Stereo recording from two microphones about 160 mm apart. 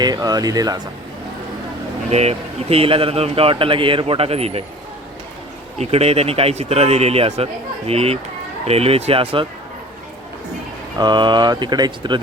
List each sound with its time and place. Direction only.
0.0 s speech: 25° right (ahead or behind)
2.0 s speech: 40° right (ahead or behind)
5.8 s speech: 40° right (ahead or behind)
10.9 s speech: 25° right (ahead or behind)